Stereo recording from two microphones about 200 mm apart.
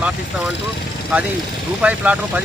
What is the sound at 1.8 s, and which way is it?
Speech, 5° right (ahead or behind).